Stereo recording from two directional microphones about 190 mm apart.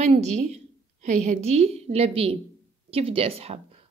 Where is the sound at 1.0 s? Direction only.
40° right (ahead or behind).